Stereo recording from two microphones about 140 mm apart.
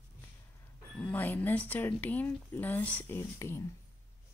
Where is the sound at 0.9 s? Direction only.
10° left (ahead or behind).